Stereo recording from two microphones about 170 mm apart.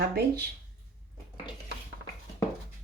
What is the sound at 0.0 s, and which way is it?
Speech, 70° right (ahead or behind).